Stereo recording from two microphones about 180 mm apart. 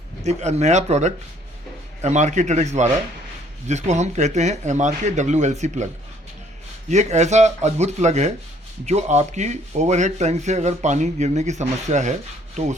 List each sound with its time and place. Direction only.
0.3 s speech: 40° right (ahead or behind)
6.9 s speech: 40° right (ahead or behind)